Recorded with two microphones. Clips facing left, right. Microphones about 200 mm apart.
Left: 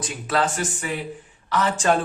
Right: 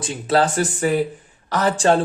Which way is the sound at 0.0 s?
30° right (ahead or behind).